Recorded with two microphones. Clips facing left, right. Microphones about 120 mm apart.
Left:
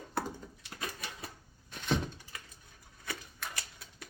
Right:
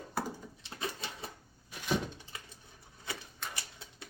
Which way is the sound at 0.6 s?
25° right (ahead or behind).